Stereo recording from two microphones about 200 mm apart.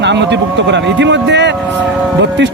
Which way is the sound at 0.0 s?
60° right (ahead or behind).